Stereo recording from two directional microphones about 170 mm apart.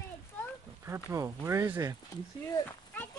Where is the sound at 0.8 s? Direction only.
15° right (ahead or behind).